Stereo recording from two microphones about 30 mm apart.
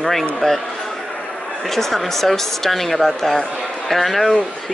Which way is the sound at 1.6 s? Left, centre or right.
Centre.